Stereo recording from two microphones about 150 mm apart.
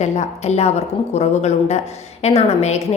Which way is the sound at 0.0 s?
50° left (ahead or behind).